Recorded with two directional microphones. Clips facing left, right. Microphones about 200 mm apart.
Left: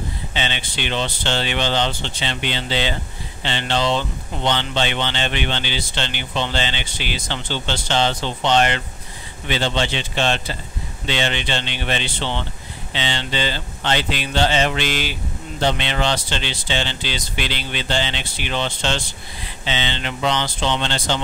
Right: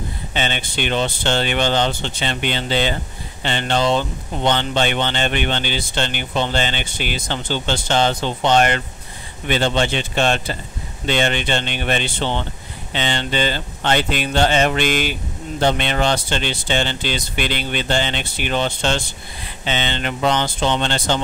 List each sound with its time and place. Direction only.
0.3 s speech: 50° right (ahead or behind)